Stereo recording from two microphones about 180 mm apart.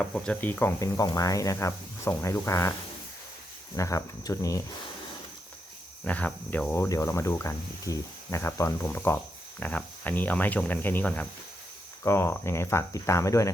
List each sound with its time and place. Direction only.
0.0 s speech: 5° left (ahead or behind)
3.8 s speech: 15° left (ahead or behind)
6.1 s speech: 10° left (ahead or behind)